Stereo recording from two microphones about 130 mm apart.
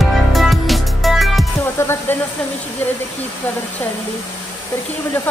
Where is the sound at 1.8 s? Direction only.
20° left (ahead or behind).